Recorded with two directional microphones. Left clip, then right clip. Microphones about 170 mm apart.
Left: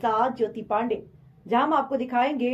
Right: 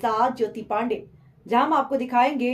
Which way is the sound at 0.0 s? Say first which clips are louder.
Right 1 dB; 15° right (ahead or behind).